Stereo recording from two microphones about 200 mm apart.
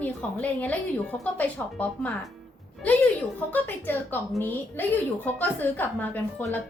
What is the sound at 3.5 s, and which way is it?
A woman's voice, 10° left (ahead or behind).